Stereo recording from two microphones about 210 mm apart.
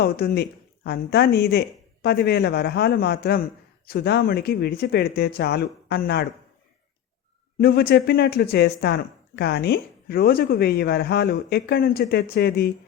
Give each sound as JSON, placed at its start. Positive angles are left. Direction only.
{"t": 0.0, "sound": "speech", "side_deg": 45}
{"t": 7.6, "sound": "speech", "side_deg": 50}